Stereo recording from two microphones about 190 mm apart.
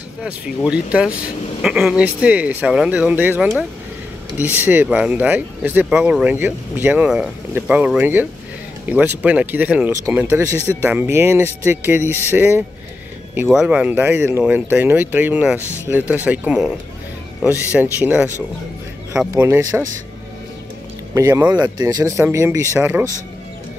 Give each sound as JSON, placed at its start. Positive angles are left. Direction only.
{"t": 0.7, "sound": "speech", "side_deg": -5}
{"t": 17.9, "sound": "speech", "side_deg": -10}
{"t": 19.3, "sound": "speech", "side_deg": -15}
{"t": 21.1, "sound": "speech", "side_deg": -15}